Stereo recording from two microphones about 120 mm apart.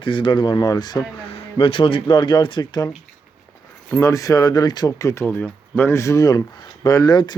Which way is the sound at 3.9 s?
25° left (ahead or behind).